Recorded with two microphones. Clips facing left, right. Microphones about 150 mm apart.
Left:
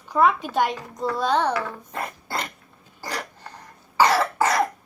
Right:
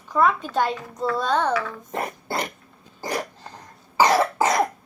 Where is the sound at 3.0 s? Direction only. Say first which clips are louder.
Right 4 dB; 20° right (ahead or behind).